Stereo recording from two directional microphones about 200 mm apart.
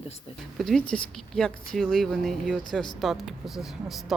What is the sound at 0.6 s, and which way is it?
Speech, centre (ahead or behind).